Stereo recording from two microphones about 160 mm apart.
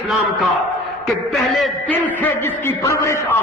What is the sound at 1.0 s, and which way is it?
Speech, centre (ahead or behind).